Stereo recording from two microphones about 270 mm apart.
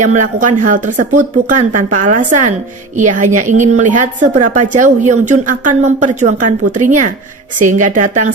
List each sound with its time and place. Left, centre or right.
0.0 s a woman's voice: right